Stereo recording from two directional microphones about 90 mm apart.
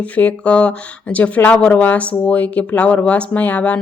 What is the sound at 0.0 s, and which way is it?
Speech, 15° left (ahead or behind).